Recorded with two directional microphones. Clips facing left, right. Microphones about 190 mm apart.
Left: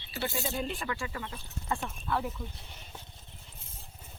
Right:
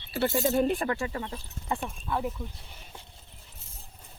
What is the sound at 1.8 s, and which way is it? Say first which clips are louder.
Speech: right 2 dB; 10° right (ahead or behind).